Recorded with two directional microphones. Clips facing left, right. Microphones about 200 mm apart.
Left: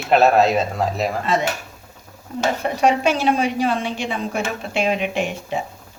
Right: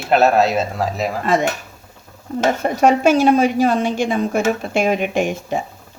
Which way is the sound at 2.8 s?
45° right (ahead or behind).